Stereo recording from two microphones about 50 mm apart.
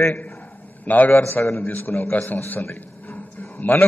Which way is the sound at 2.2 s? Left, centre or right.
Left.